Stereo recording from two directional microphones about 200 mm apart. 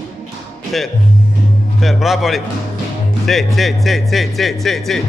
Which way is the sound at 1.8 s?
Centre (ahead or behind).